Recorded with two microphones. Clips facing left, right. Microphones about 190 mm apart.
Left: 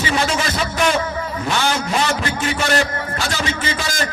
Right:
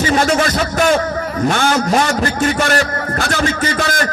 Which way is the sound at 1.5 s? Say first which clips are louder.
Right 4 dB; 50° right (ahead or behind).